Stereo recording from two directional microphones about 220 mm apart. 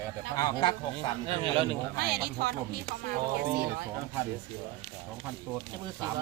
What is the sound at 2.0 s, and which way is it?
Speech, 45° right (ahead or behind).